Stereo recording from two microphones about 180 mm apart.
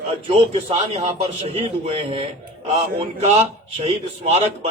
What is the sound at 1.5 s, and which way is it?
A man's voice, 30° right (ahead or behind).